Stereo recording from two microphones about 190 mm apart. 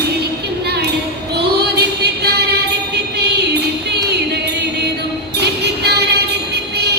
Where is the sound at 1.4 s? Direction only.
60° right (ahead or behind).